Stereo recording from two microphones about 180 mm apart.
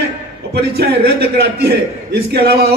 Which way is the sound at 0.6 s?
65° right (ahead or behind).